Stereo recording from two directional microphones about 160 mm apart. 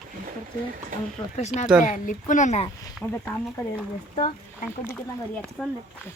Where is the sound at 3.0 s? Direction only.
10° left (ahead or behind).